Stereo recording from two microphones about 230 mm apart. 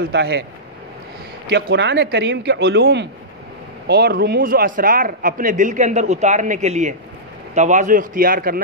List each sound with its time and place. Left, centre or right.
0.1 s speech: right
1.5 s speech: right